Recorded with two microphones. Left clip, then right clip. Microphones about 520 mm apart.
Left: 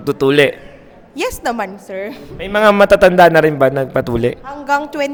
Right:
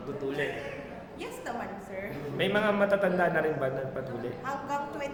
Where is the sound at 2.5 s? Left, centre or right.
Left.